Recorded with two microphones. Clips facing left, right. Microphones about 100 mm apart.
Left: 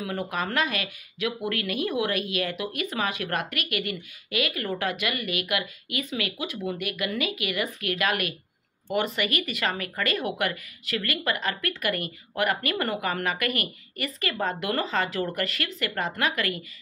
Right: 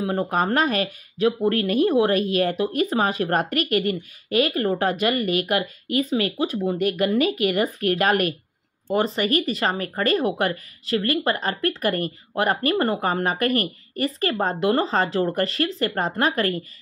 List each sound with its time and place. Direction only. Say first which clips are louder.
0.0 s speech: right 7 dB; 35° right (ahead or behind)